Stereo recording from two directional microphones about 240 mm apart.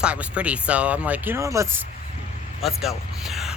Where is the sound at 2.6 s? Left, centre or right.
Centre.